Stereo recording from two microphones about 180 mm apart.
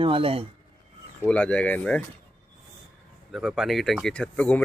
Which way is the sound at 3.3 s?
Centre (ahead or behind).